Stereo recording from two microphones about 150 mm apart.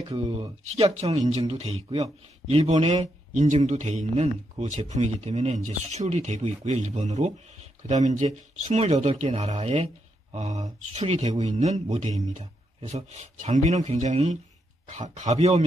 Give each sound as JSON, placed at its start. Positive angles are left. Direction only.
{"t": 0.7, "sound": "speech", "side_deg": -45}
{"t": 3.3, "sound": "speech", "side_deg": -50}